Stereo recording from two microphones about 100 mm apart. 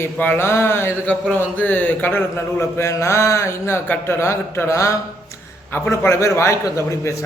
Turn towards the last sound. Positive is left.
turn(degrees=30)  # may be behind; listen again after turning